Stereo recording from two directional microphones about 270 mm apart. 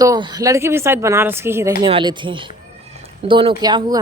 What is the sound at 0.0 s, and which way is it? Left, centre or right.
Speech, centre.